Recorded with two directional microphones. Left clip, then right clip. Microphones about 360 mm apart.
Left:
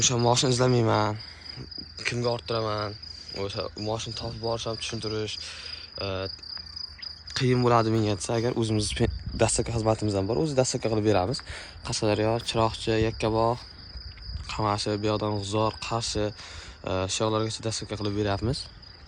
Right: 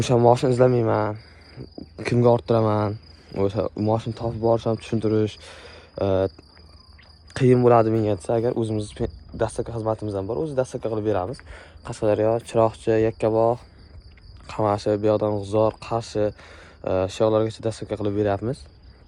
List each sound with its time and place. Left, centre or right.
0.0 s speech: centre
2.0 s speech: centre
5.1 s cricket: centre
7.0 s speech: centre